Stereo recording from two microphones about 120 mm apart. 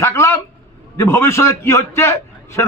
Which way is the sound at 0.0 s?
20° left (ahead or behind).